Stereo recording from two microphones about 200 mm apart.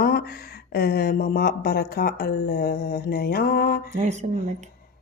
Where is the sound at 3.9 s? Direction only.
35° right (ahead or behind).